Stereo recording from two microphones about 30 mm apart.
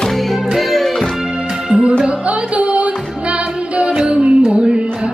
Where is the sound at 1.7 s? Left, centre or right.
Right.